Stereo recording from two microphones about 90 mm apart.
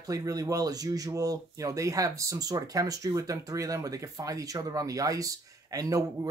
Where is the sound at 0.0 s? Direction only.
40° right (ahead or behind).